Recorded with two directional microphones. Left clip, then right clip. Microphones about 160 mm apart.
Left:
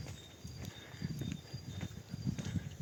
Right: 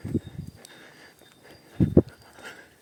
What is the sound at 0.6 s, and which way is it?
Horse, 35° right (ahead or behind).